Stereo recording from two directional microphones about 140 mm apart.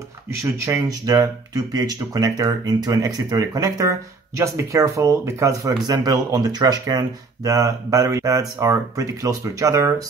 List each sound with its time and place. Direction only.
0.7 s speech: 25° right (ahead or behind)